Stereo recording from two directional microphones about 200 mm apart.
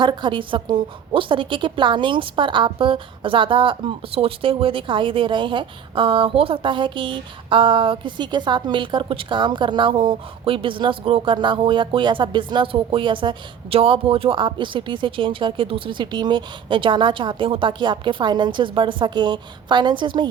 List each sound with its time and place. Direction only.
0.0 s a woman's voice: 20° right (ahead or behind)